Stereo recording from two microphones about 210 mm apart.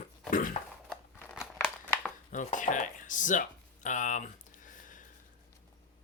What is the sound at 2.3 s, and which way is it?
Speech, 35° left (ahead or behind).